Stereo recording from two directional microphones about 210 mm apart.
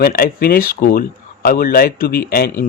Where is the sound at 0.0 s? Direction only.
45° left (ahead or behind).